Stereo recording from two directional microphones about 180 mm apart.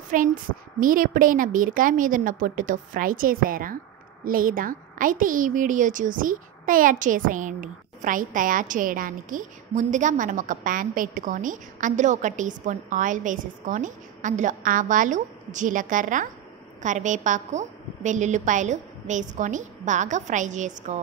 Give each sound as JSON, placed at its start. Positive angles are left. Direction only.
{"t": 0.1, "sound": "a woman's voice", "side_deg": -50}